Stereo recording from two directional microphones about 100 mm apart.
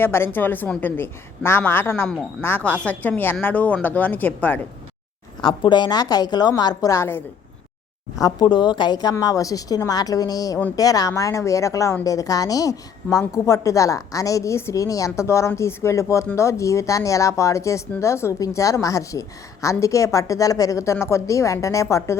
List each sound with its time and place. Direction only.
0.0 s a woman's voice: 25° left (ahead or behind)
2.6 s speech: 15° left (ahead or behind)
5.4 s a woman's voice: 50° left (ahead or behind)
6.9 s a woman's voice: 25° left (ahead or behind)
8.2 s a woman's voice: 50° left (ahead or behind); by 22.2 s 30° left (ahead or behind)